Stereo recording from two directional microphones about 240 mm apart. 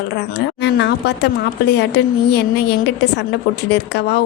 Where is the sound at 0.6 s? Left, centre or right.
Left.